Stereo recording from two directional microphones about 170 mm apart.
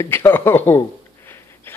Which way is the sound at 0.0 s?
15° left (ahead or behind).